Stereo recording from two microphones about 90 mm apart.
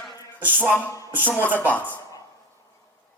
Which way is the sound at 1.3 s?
20° left (ahead or behind).